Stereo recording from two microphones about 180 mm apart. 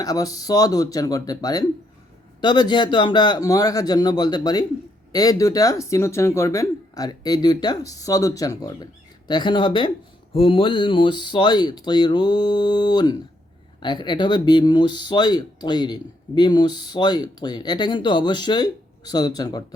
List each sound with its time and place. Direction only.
0.0 s speech: 20° left (ahead or behind)